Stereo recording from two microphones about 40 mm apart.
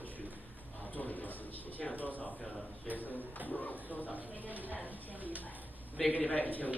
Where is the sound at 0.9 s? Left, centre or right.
Left.